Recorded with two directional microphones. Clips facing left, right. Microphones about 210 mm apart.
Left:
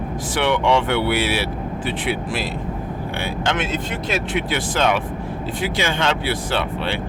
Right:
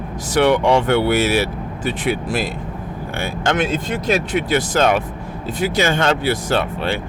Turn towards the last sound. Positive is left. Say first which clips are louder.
# right 3 dB
turn(degrees=-45)  # may be behind; listen again after turning